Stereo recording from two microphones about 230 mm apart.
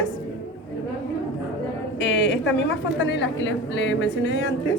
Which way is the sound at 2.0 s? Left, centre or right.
Left.